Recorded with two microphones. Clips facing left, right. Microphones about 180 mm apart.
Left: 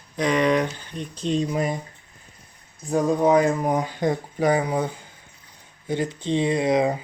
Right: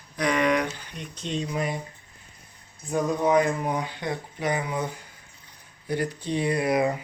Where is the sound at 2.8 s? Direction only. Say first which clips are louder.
Left 4 dB; 30° left (ahead or behind).